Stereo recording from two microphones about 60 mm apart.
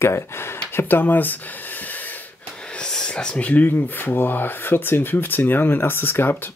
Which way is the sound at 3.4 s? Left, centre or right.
Left.